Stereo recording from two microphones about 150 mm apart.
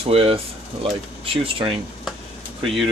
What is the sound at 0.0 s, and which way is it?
Speech, 40° right (ahead or behind).